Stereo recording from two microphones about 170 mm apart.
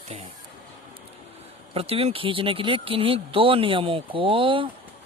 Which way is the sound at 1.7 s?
35° right (ahead or behind).